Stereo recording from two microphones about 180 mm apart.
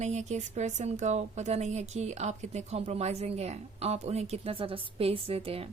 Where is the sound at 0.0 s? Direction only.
40° right (ahead or behind).